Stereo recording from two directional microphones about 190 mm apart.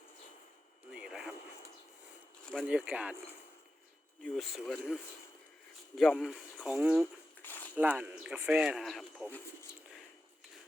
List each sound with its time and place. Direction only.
0.9 s radio: 5° right (ahead or behind)
2.6 s speech: 5° right (ahead or behind)
4.2 s speech: centre (ahead or behind)
6.0 s speech: centre (ahead or behind)
7.4 s a sound: 10° left (ahead or behind)
7.8 s speech: 10° right (ahead or behind)